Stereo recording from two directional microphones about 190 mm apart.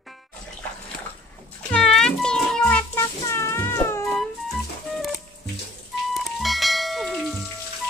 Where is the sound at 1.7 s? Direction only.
5° left (ahead or behind).